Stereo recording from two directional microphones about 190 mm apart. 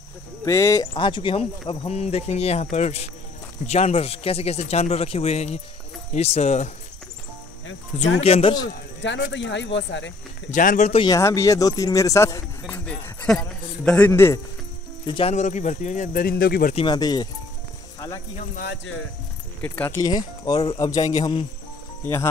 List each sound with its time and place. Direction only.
0.5 s speech: 15° left (ahead or behind); by 6.7 s 35° left (ahead or behind)
8.2 s speech: 30° left (ahead or behind)
9.3 s speech: 70° left (ahead or behind)
10.5 s speech: 45° left (ahead or behind)
11.1 s speech: 15° left (ahead or behind)
15.0 s speech: 30° left (ahead or behind); by 16.7 s 55° left (ahead or behind)
16.7 s a man's voice: 25° left (ahead or behind)
18.4 s speech: 50° left (ahead or behind)
19.6 s a man's voice: 10° left (ahead or behind)